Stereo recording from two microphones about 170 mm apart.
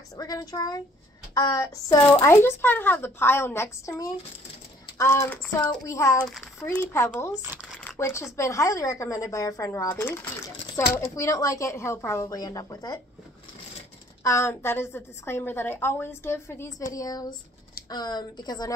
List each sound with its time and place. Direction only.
0.2 s a woman's voice: 20° left (ahead or behind)
14.2 s a woman's voice: 15° left (ahead or behind)